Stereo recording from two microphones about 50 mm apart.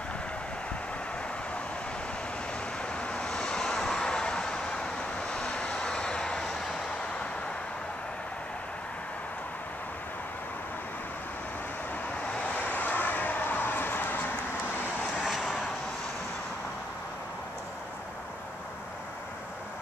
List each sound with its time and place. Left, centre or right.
2.8 s vehicle: left
12.5 s vehicle: left
15.1 s vehicle: centre